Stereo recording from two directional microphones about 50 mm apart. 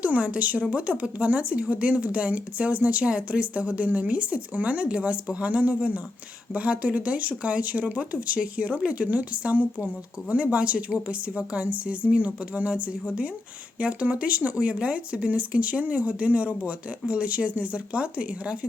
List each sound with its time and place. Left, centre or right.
0.0 s a woman's voice: right